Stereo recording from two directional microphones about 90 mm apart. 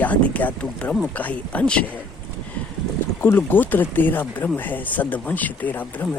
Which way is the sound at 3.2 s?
20° left (ahead or behind).